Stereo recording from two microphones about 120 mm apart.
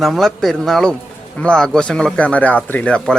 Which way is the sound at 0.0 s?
Centre (ahead or behind).